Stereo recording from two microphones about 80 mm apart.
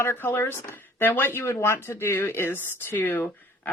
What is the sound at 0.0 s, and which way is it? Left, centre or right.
Speech, left.